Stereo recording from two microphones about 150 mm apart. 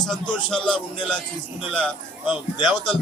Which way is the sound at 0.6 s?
35° left (ahead or behind).